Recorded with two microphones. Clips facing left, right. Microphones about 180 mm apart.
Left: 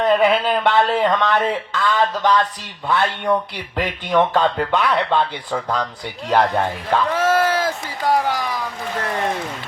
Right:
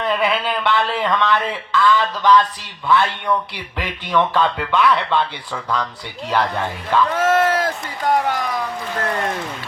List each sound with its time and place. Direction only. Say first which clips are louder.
0.0 s a man's voice: left 4 dB; 45° left (ahead or behind)
7.3 s speech: right 1 dB; centre (ahead or behind)